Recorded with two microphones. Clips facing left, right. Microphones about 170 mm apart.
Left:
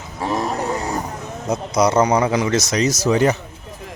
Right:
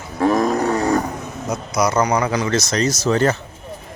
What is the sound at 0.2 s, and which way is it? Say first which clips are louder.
Wild animals: right 6 dB; 70° right (ahead or behind).